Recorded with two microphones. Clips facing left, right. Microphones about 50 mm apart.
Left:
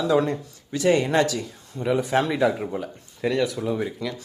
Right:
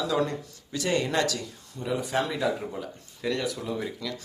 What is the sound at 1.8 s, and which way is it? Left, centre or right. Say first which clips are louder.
Speech: left 6 dB; left.